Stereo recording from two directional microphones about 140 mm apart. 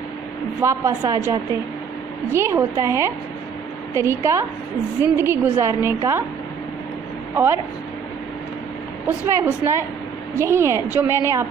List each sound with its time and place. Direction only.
0.6 s a woman's voice: 20° right (ahead or behind)
9.0 s a woman's voice: 20° right (ahead or behind)